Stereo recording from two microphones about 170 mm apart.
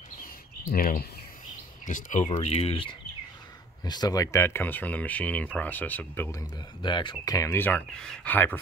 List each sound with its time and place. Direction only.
0.7 s speech: 60° left (ahead or behind)
1.9 s speech: 50° left (ahead or behind)
2.2 s speech: 35° left (ahead or behind); by 6.4 s 10° left (ahead or behind)
6.8 s speech: 25° left (ahead or behind); by 8.5 s 10° left (ahead or behind)